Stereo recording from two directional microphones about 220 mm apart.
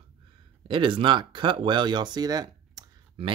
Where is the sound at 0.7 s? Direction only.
20° right (ahead or behind).